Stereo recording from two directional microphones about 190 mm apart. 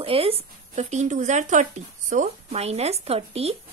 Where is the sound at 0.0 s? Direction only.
30° right (ahead or behind).